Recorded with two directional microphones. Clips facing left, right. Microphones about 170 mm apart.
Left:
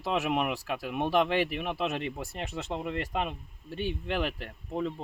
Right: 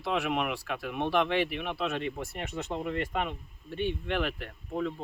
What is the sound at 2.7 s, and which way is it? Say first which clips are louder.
Speech: even; 25° left (ahead or behind).